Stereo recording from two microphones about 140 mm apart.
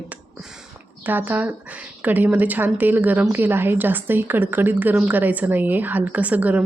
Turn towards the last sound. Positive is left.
turn(degrees=-10)  # may be behind; listen again after turning